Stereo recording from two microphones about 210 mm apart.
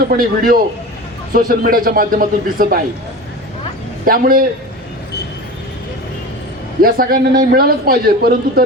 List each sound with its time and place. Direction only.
0.0 s a man's voice: 45° right (ahead or behind)
4.0 s a man's voice: 45° right (ahead or behind)
6.8 s a man's voice: 45° right (ahead or behind)